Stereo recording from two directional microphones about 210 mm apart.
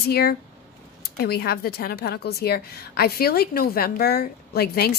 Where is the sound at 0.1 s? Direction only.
45° left (ahead or behind).